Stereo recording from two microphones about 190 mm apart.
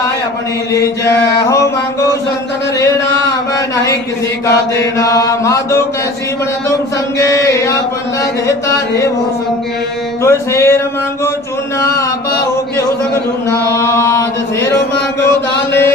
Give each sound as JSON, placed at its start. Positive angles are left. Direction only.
{"t": 1.5, "sound": "a sound", "side_deg": 15}
{"t": 4.9, "sound": "chant", "side_deg": 15}
{"t": 7.2, "sound": "chant", "side_deg": 15}
{"t": 10.2, "sound": "chant", "side_deg": 15}
{"t": 13.7, "sound": "chant", "side_deg": 15}